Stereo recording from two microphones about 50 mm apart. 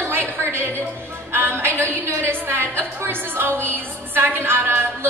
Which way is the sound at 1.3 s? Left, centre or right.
Right.